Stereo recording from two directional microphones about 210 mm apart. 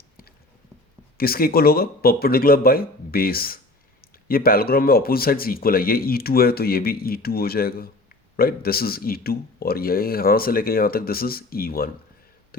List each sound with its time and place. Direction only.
1.2 s speech: 45° left (ahead or behind)